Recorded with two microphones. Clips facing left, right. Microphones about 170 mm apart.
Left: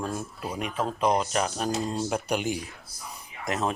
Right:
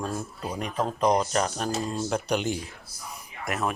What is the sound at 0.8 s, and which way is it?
Speech, 5° left (ahead or behind).